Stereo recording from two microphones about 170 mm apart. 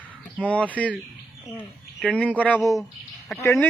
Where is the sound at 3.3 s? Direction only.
15° left (ahead or behind).